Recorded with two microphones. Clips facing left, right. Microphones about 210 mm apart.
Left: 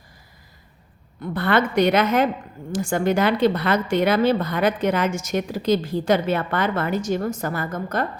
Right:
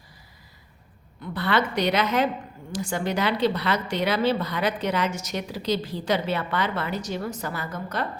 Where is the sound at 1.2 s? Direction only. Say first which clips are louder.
Left 4 dB; 50° left (ahead or behind).